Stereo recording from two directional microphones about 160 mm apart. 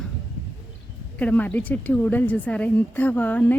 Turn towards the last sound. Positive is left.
turn(degrees=10)  # may be behind; listen again after turning